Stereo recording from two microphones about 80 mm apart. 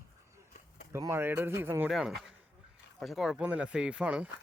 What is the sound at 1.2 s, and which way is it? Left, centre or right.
Speech, right.